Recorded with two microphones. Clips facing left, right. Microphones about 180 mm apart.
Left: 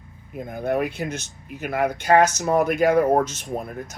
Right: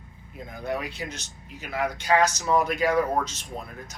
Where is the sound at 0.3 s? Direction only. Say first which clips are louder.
Left 7 dB; 55° left (ahead or behind).